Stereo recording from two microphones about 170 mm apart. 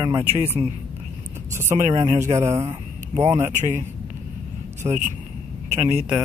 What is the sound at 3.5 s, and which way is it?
Speech, 45° right (ahead or behind).